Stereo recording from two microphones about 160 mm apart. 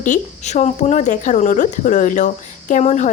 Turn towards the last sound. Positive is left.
turn(degrees=45)  # may be behind; listen again after turning